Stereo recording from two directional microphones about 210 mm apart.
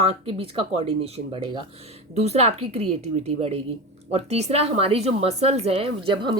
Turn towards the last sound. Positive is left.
turn(degrees=-25)  # may be behind; listen again after turning